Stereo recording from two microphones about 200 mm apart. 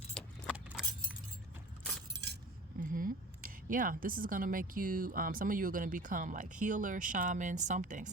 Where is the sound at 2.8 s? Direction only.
45° right (ahead or behind).